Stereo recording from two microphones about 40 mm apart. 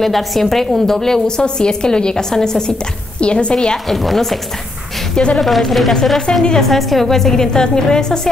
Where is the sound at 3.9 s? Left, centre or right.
Centre.